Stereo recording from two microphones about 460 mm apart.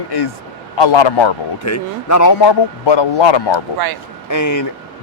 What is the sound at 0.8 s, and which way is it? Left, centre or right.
Speech, left.